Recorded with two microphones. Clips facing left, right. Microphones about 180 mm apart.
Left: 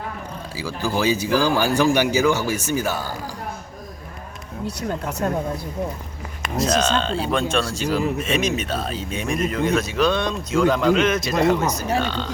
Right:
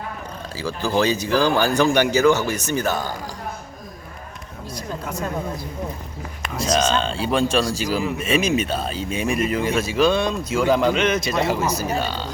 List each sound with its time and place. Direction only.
0.5 s speech: 10° left (ahead or behind)
4.6 s speech: 70° left (ahead or behind)
6.7 s a man's voice: centre (ahead or behind)